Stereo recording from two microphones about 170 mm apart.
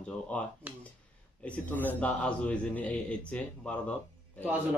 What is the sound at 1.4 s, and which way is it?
A man's voice, 10° left (ahead or behind).